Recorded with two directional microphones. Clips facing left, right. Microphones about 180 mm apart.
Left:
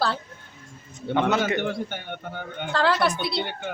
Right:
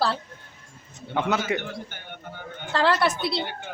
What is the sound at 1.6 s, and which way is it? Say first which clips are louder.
Speech: left 8 dB; 70° left (ahead or behind).